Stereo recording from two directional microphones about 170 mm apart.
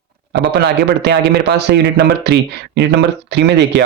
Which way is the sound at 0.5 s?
85° right.